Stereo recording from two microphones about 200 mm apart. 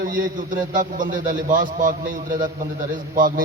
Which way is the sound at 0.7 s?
40° right (ahead or behind).